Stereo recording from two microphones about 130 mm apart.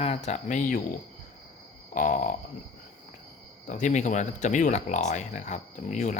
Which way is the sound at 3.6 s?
75° left (ahead or behind).